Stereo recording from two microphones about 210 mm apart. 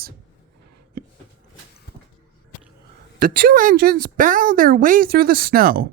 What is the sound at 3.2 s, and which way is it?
A woman's voice, 40° right (ahead or behind).